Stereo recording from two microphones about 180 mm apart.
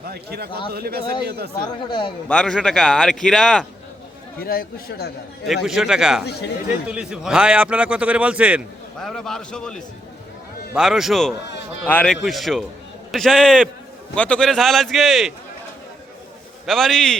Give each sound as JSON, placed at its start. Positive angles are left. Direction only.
{"t": 0.1, "sound": "a man's voice", "side_deg": -60}
{"t": 1.9, "sound": "a man's voice", "side_deg": 25}
{"t": 2.2, "sound": "speech", "side_deg": 5}
{"t": 4.4, "sound": "speech", "side_deg": 60}
{"t": 5.6, "sound": "a man's voice", "side_deg": 0}
{"t": 16.6, "sound": "speech", "side_deg": 0}